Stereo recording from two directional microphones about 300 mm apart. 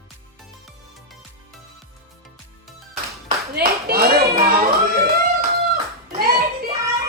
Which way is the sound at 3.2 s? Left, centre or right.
Right.